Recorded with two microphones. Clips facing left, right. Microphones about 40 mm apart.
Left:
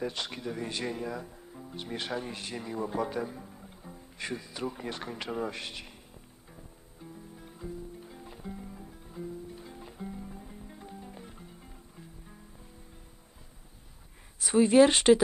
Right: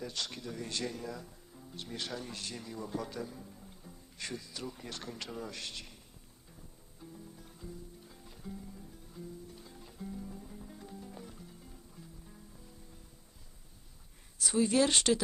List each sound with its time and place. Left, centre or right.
0.0 s a man's voice: left
4.2 s a man's voice: left
7.0 s music: left
14.3 s a man's voice: left